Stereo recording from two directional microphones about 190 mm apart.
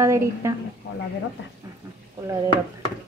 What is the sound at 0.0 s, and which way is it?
Speech, 15° right (ahead or behind).